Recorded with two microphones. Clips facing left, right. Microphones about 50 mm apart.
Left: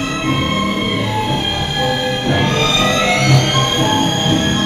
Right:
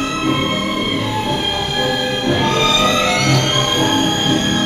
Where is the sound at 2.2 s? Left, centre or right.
Left.